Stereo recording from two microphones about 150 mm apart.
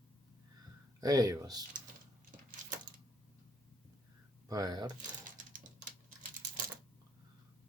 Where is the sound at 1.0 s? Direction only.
25° right (ahead or behind).